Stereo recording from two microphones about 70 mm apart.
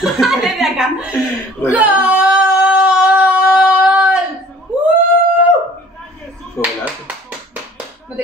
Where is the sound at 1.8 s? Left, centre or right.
Right.